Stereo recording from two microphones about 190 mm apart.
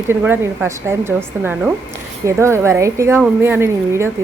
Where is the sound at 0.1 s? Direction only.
10° right (ahead or behind).